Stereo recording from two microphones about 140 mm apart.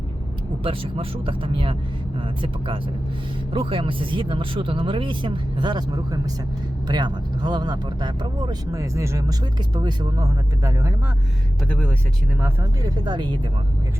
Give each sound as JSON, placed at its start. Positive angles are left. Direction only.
{"t": 0.6, "sound": "speech", "side_deg": -40}
{"t": 12.8, "sound": "speech", "side_deg": -30}